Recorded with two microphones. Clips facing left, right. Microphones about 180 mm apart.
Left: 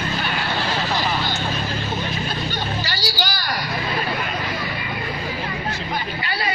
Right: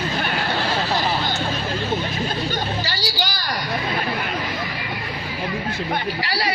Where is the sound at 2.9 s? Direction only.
25° right (ahead or behind).